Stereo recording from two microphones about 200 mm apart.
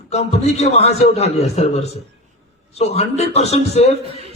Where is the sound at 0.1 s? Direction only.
35° left (ahead or behind).